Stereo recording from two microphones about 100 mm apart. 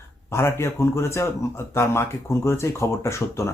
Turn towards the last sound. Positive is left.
turn(degrees=30)  # may be behind; listen again after turning